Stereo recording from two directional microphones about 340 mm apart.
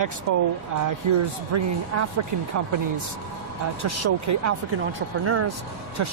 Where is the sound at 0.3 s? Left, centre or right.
Right.